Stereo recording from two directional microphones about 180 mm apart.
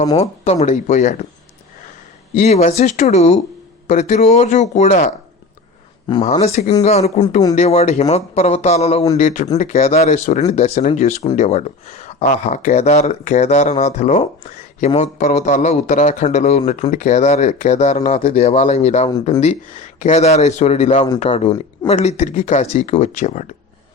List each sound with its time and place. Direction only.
0.2 s speech: 40° left (ahead or behind)
2.4 s speech: 35° left (ahead or behind)
6.3 s speech: 35° left (ahead or behind)